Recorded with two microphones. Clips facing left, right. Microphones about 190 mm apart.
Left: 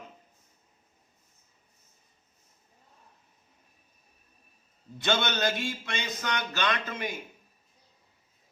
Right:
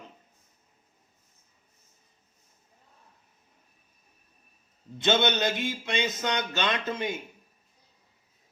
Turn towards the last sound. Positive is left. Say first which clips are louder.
# right 2 dB
turn(degrees=-25)  # may be behind; listen again after turning